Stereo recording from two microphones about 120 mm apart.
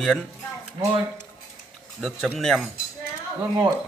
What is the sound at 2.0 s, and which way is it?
Speech, centre (ahead or behind).